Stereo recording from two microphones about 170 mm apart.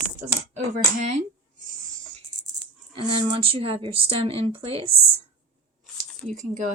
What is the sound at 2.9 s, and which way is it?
Speech, 30° right (ahead or behind).